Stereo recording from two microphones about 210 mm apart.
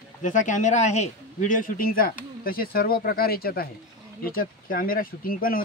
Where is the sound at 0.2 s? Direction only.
35° left (ahead or behind).